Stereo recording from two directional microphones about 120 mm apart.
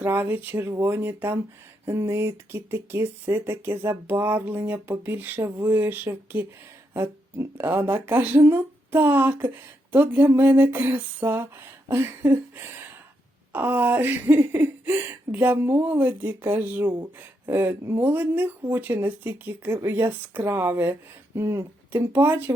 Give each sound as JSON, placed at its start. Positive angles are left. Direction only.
{"t": 0.0, "sound": "speech", "side_deg": -15}